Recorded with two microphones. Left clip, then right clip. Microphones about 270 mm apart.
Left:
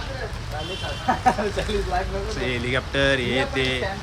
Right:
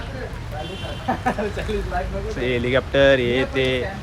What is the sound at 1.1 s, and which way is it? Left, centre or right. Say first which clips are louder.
Speech: left 2 dB; left.